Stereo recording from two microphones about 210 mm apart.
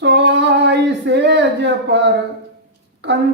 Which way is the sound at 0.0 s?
55° right (ahead or behind).